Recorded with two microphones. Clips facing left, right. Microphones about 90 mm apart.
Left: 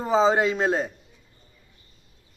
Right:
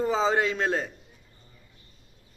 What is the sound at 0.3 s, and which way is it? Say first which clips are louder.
Speech: left 3 dB; 10° left (ahead or behind).